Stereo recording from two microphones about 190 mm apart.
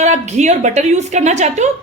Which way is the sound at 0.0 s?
35° right (ahead or behind).